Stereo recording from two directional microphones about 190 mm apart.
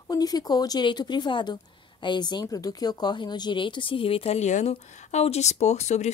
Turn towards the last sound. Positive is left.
turn(degrees=35)  # may be behind; listen again after turning